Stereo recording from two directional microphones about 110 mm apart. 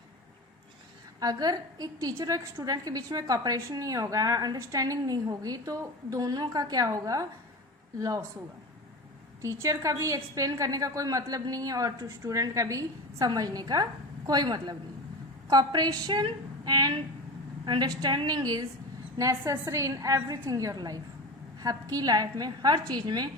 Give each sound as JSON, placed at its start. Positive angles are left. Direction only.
{"t": 1.2, "sound": "a woman's voice", "side_deg": -35}
{"t": 9.4, "sound": "a woman's voice", "side_deg": -25}